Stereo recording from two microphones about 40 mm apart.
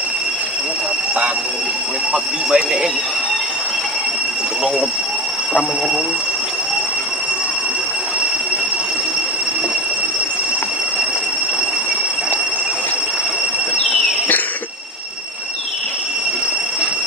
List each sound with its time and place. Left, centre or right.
2.1 s speech: centre